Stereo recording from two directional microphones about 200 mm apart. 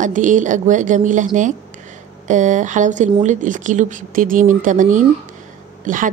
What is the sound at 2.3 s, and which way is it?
A woman's voice, 35° right (ahead or behind).